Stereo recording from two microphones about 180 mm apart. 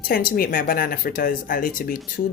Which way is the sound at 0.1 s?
55° left (ahead or behind).